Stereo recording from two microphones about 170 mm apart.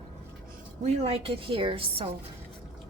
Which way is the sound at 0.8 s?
40° right (ahead or behind).